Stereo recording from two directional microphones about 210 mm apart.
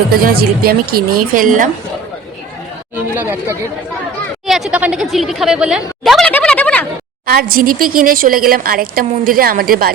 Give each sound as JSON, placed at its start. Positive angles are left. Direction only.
{"t": 0.1, "sound": "a woman's voice", "side_deg": -45}
{"t": 2.9, "sound": "speech", "side_deg": -10}
{"t": 7.3, "sound": "a woman's voice", "side_deg": -45}